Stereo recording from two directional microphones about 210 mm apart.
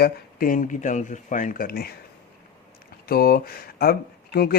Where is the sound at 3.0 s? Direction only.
45° left (ahead or behind).